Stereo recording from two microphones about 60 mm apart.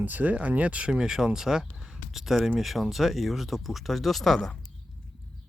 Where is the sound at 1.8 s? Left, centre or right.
Centre.